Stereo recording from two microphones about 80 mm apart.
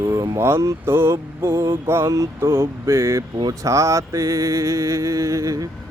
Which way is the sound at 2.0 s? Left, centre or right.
Right.